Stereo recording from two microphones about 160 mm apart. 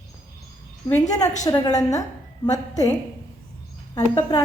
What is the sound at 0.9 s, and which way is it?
Speech, 20° left (ahead or behind).